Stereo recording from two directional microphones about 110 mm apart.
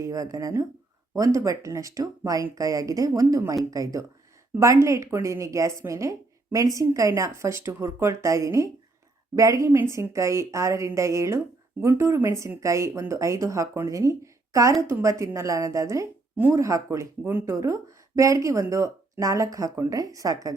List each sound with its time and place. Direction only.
0.0 s speech: 30° right (ahead or behind)